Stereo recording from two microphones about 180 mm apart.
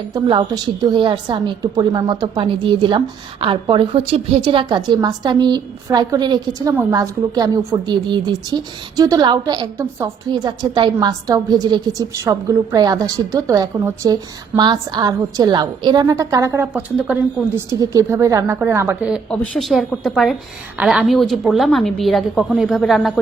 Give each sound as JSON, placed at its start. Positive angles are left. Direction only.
{"t": 0.1, "sound": "a woman's voice", "side_deg": -25}
{"t": 19.3, "sound": "a woman's voice", "side_deg": 5}